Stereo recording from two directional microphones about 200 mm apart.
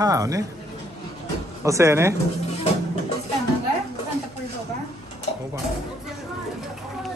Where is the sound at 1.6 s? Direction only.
15° right (ahead or behind).